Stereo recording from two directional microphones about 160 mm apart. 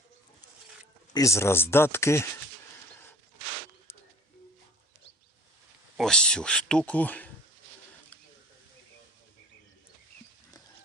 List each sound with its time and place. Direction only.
1.1 s speech: 20° left (ahead or behind)
6.0 s speech: 5° left (ahead or behind)